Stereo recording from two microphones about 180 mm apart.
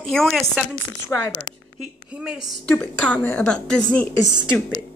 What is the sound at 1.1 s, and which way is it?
Speech, 20° left (ahead or behind).